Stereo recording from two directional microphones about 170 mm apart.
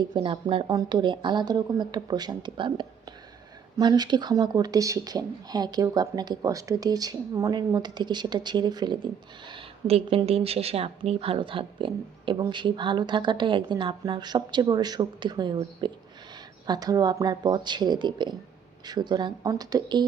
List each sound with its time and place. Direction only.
0.0 s speech: 30° right (ahead or behind)